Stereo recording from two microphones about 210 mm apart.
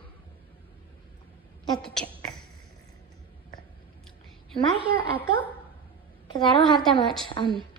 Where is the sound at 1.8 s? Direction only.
5° left (ahead or behind).